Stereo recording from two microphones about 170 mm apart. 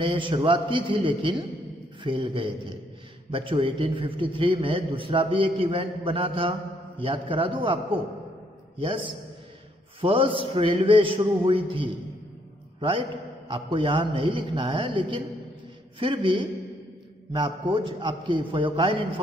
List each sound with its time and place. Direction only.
0.0 s a man's voice: 30° right (ahead or behind)